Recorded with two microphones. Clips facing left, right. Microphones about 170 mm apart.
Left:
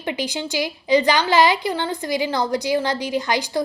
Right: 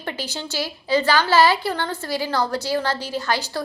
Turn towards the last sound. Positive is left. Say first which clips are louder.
# left 3 dB
turn(degrees=15)  # may be behind; listen again after turning